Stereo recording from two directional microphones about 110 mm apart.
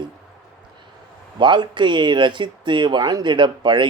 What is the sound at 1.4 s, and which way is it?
Speech, 45° right (ahead or behind).